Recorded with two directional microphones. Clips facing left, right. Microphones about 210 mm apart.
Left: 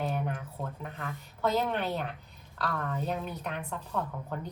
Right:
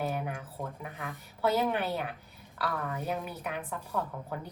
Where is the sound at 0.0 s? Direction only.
5° right (ahead or behind).